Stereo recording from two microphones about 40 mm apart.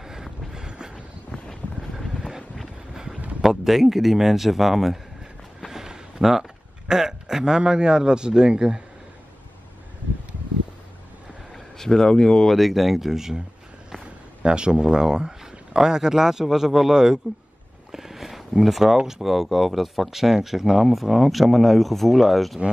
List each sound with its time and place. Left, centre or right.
0.0 s vehicle: centre
0.7 s vehicle: right
1.8 s vehicle: centre
3.2 s a sound: right
3.4 s speech: centre
5.7 s a sound: centre
6.9 s speech: centre
11.5 s speech: centre
12.5 s speech: centre
14.4 s speech: right
17.9 s a sound: centre
18.9 s speech: centre